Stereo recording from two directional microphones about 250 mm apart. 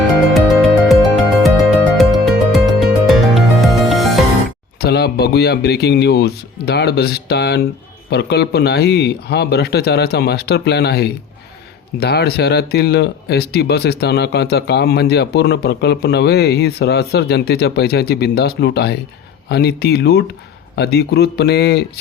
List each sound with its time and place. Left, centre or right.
1.4 s music: centre
4.8 s speech: left